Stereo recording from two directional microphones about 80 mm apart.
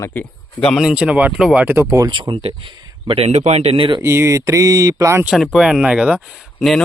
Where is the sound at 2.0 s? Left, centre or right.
Right.